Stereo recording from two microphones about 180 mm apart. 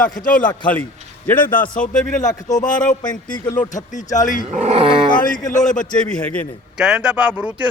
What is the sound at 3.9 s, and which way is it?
Speech, 45° left (ahead or behind).